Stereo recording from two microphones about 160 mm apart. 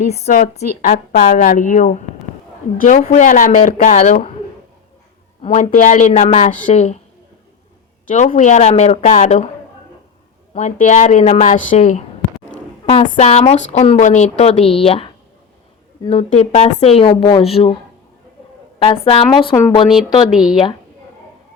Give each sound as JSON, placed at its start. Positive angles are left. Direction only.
{"t": 0.1, "sound": "a woman's voice", "side_deg": 55}
{"t": 5.4, "sound": "a woman's voice", "side_deg": 40}
{"t": 6.5, "sound": "a woman's voice", "side_deg": 50}
{"t": 8.0, "sound": "a woman's voice", "side_deg": 55}
{"t": 10.5, "sound": "a woman's voice", "side_deg": 45}
{"t": 12.8, "sound": "a sound", "side_deg": 35}
{"t": 13.1, "sound": "a woman's voice", "side_deg": 45}
{"t": 18.8, "sound": "a woman's voice", "side_deg": 35}
{"t": 20.3, "sound": "a woman's voice", "side_deg": -5}